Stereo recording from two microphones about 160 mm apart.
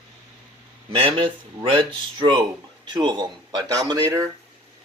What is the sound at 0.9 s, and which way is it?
Speech, 30° right (ahead or behind).